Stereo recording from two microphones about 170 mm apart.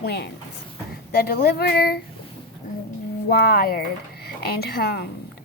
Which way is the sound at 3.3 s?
65° left (ahead or behind).